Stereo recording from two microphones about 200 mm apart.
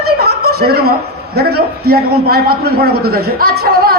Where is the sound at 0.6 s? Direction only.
50° right (ahead or behind).